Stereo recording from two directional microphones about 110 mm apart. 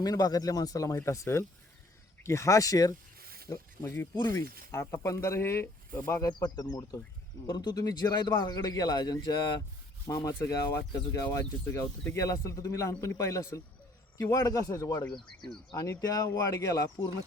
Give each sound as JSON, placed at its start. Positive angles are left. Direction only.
{"t": 0.0, "sound": "speech", "side_deg": 35}
{"t": 3.8, "sound": "speech", "side_deg": 20}
{"t": 4.1, "sound": "speech", "side_deg": 40}
{"t": 4.4, "sound": "speech", "side_deg": 25}
{"t": 6.2, "sound": "speech", "side_deg": 35}